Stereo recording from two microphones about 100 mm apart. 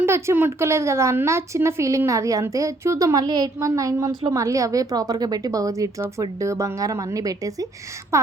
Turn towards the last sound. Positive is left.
turn(degrees=-35)  # may be behind; listen again after turning